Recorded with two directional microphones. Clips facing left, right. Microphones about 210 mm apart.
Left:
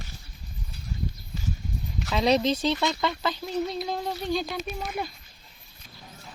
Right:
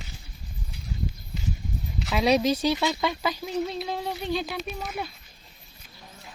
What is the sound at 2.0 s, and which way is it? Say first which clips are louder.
Speech: right 1 dB; 10° right (ahead or behind).